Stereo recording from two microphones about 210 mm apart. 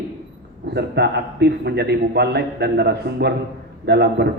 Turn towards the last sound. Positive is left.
turn(degrees=-50)  # may be behind; listen again after turning